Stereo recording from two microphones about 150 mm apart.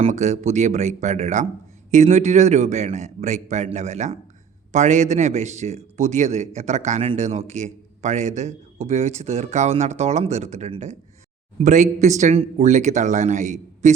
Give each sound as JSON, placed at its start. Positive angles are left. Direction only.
{"t": 0.0, "sound": "a man's voice", "side_deg": -50}